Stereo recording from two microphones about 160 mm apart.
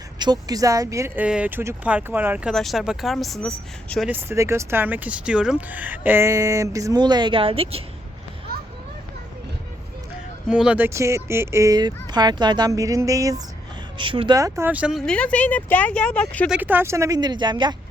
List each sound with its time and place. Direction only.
0.2 s speech: 25° right (ahead or behind); by 4.1 s centre (ahead or behind)
4.1 s speech: 15° right (ahead or behind); by 7.8 s 35° right (ahead or behind)
10.5 s speech: 5° right (ahead or behind)
14.0 s speech: 30° right (ahead or behind); by 16.5 s 10° left (ahead or behind)
16.5 s speech: 10° right (ahead or behind); by 17.7 s 30° right (ahead or behind)